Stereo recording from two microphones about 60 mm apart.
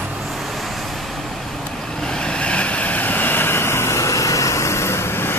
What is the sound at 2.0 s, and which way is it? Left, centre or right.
Vehicle, centre.